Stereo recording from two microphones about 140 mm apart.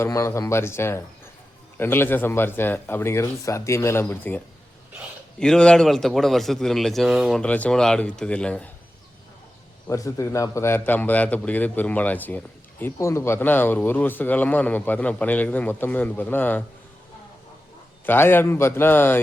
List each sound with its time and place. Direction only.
0.0 s a man's voice: 20° left (ahead or behind)
9.9 s speech: 20° left (ahead or behind)
18.0 s speech: 15° left (ahead or behind)